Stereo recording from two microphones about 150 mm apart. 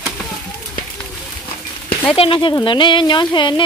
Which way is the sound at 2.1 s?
35° left (ahead or behind).